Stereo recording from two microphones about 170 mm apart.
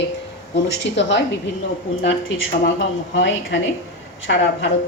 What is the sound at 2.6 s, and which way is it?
A woman's voice, 90° left.